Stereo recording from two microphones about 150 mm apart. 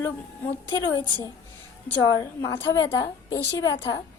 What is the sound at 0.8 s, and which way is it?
Speech, 35° left (ahead or behind).